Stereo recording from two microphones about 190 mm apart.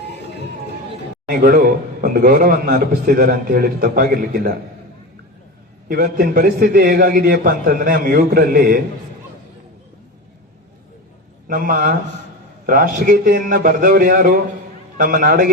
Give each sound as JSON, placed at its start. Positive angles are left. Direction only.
{"t": 1.3, "sound": "a man's voice", "side_deg": -50}
{"t": 5.9, "sound": "a man's voice", "side_deg": -50}
{"t": 11.4, "sound": "a man's voice", "side_deg": -50}